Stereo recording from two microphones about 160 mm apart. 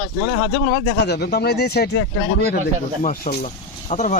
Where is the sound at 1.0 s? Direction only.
90° left.